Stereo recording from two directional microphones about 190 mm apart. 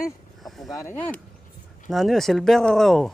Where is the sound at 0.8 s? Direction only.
10° left (ahead or behind).